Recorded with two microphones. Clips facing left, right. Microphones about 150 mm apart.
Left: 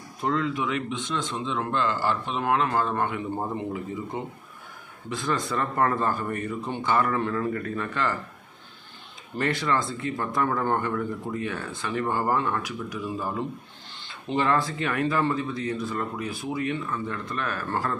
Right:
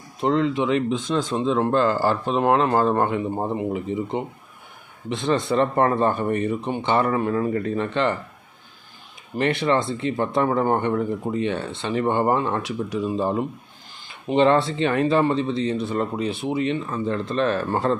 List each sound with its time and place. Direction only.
0.2 s speech: 25° right (ahead or behind)
9.4 s speech: 25° right (ahead or behind)